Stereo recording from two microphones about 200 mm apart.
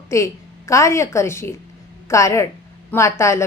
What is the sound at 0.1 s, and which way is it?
A woman's voice, 15° left (ahead or behind).